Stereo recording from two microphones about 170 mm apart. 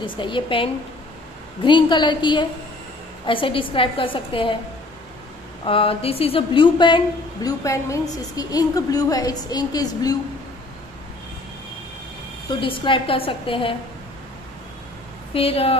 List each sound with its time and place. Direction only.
0.0 s a woman's voice: 30° left (ahead or behind)
5.7 s a woman's voice: 35° left (ahead or behind)
7.4 s a woman's voice: 15° left (ahead or behind)
12.4 s a woman's voice: 30° left (ahead or behind)
15.3 s a woman's voice: 35° left (ahead or behind)